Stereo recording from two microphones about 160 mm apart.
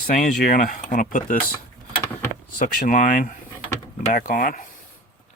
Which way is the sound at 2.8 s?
55° left (ahead or behind).